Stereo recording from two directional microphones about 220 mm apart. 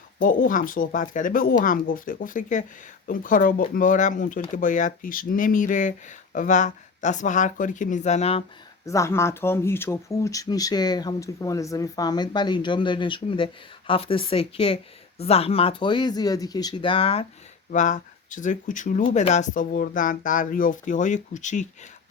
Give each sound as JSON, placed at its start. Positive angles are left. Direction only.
{"t": 0.2, "sound": "speech", "side_deg": 40}
{"t": 8.9, "sound": "speech", "side_deg": 15}